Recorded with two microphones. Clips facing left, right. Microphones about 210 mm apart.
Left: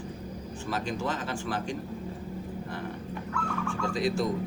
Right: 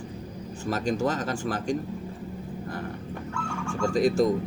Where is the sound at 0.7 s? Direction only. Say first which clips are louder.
Right 5 dB; 45° right (ahead or behind).